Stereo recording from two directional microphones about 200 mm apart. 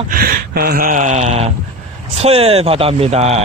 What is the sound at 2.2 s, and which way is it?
Speech, 30° right (ahead or behind).